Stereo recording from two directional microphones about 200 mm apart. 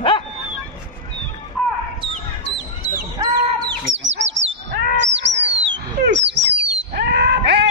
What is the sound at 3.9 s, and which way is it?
Bird, 70° right (ahead or behind).